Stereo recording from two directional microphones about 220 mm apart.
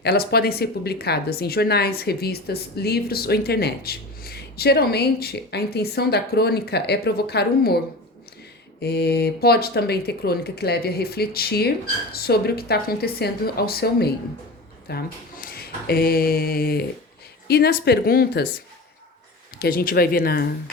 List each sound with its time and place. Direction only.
0.0 s speech: 45° left (ahead or behind)
8.8 s speech: 45° left (ahead or behind)
19.5 s speech: 45° left (ahead or behind)